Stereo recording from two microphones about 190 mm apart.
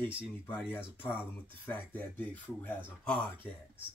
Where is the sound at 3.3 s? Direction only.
25° right (ahead or behind).